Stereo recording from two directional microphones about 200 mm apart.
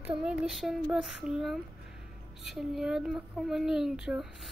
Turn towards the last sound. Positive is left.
turn(degrees=0)  # may be behind; listen again after turning